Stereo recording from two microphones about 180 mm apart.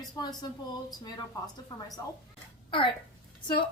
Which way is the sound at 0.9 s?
20° left (ahead or behind).